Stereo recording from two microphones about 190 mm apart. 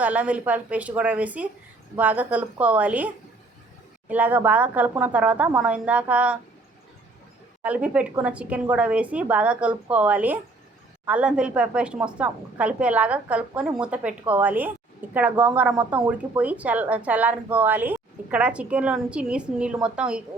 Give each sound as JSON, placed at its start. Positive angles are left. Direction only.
{"t": 0.0, "sound": "a woman's voice", "side_deg": -5}
{"t": 4.1, "sound": "a woman's voice", "side_deg": -10}
{"t": 7.6, "sound": "a woman's voice", "side_deg": -5}